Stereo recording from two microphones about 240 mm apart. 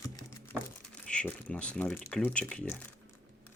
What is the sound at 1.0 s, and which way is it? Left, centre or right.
Speech, centre.